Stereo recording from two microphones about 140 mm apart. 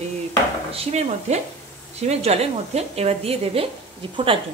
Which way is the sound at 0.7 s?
50° right (ahead or behind).